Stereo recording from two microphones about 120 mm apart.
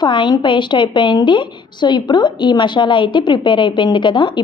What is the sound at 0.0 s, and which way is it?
A woman's voice, 40° left (ahead or behind).